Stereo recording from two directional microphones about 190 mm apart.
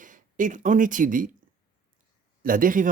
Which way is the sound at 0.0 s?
45° right (ahead or behind).